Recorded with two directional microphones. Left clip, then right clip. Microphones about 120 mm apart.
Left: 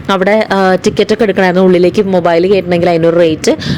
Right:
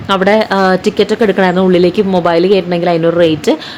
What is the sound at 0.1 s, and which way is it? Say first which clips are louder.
Speech: even; 50° left (ahead or behind).